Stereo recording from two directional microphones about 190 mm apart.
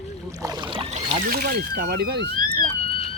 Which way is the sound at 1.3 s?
50° right (ahead or behind).